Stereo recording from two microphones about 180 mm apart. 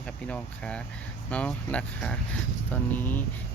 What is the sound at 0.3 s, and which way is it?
Speech, 5° left (ahead or behind).